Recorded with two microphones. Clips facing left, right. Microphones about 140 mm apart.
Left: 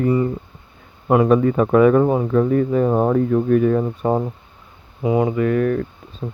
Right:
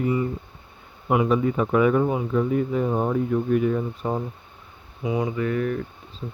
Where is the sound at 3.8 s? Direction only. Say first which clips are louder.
Left 7 dB; 65° left (ahead or behind).